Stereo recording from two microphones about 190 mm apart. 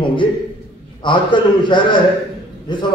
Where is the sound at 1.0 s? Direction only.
25° left (ahead or behind).